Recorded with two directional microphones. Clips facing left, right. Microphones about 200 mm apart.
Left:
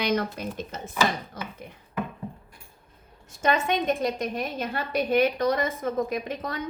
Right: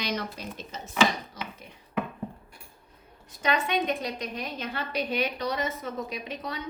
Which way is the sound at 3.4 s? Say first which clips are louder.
Left 3 dB; 45° left (ahead or behind).